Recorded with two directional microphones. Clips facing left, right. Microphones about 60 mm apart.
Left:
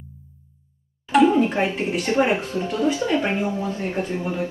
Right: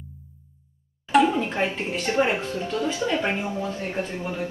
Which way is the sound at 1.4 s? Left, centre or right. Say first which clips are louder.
Left 5 dB; left.